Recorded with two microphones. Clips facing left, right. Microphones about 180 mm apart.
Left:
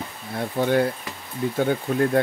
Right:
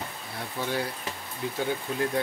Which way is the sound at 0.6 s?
55° left (ahead or behind).